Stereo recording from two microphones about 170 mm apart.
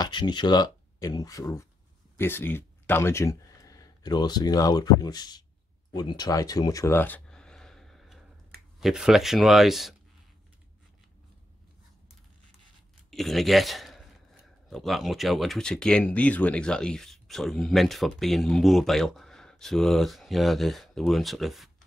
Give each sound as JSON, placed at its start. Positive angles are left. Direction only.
{"t": 0.0, "sound": "speech", "side_deg": 25}
{"t": 5.9, "sound": "a sound", "side_deg": 25}
{"t": 8.7, "sound": "speech", "side_deg": 0}
{"t": 13.1, "sound": "speech", "side_deg": 0}